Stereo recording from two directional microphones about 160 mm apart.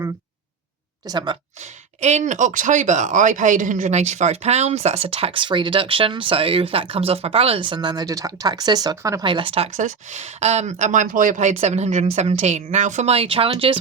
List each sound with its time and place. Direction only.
1.0 s speech: 25° right (ahead or behind)
2.0 s a man's voice: 45° right (ahead or behind)
9.7 s speech: 50° right (ahead or behind)